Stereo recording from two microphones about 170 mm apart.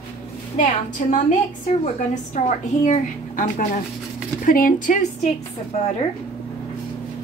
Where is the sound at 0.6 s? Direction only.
50° left (ahead or behind).